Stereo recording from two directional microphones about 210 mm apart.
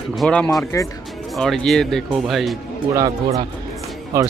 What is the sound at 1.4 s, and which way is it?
Speech, centre (ahead or behind).